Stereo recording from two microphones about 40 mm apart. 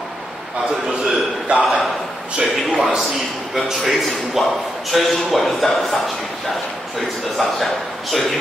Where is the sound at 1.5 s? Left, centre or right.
Right.